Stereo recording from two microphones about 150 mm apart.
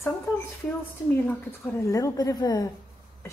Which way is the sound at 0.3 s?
15° left (ahead or behind).